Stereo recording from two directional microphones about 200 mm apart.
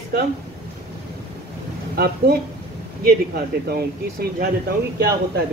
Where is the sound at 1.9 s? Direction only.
50° right (ahead or behind).